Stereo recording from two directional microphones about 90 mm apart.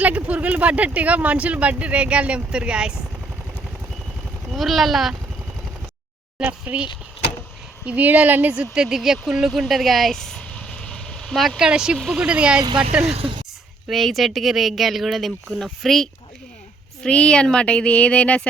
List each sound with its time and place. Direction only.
0.0 s speech: 15° right (ahead or behind)
4.4 s speech: centre (ahead or behind)
6.4 s speech: 10° right (ahead or behind)
7.9 s speech: 15° right (ahead or behind)
8.7 s speech: 5° right (ahead or behind)
9.5 s vehicle: centre (ahead or behind)
11.3 s speech: 5° right (ahead or behind)
12.6 s speech: 60° right (ahead or behind)
13.1 s speech: 80° right
13.8 s speech: centre (ahead or behind)